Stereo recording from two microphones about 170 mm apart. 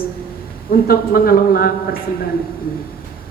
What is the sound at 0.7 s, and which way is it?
A man's voice, 60° left (ahead or behind).